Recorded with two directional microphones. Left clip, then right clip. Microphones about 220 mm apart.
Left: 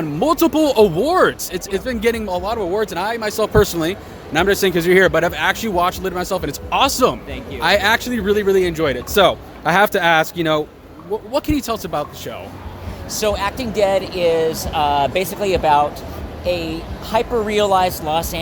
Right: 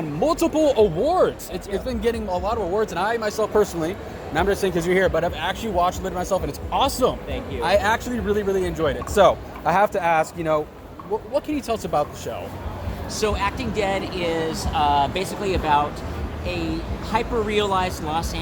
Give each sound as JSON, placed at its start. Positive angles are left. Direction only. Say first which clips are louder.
{"t": 0.2, "sound": "speech", "louder": "left 4 dB", "side_deg": 45}
{"t": 11.7, "sound": "speech", "louder": "even", "side_deg": 30}
{"t": 13.1, "sound": "speech", "louder": "left 4 dB", "side_deg": 55}